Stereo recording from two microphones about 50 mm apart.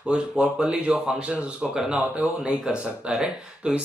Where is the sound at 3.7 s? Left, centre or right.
Centre.